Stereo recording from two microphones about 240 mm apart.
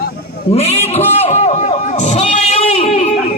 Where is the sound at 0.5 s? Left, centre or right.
Left.